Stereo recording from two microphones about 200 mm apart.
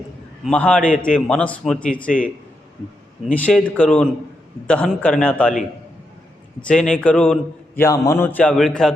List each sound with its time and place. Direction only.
0.4 s speech: 5° left (ahead or behind)
2.0 s a man's voice: 40° left (ahead or behind)
3.3 s a man's voice: 5° left (ahead or behind)
6.6 s speech: 5° left (ahead or behind)
7.8 s a man's voice: 15° left (ahead or behind)